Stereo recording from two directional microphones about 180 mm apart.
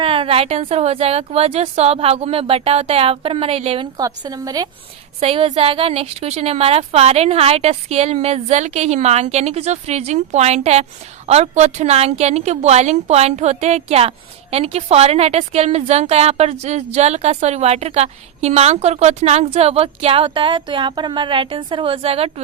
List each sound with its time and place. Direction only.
0.0 s a woman's voice: 30° right (ahead or behind)
5.2 s a woman's voice: 30° right (ahead or behind)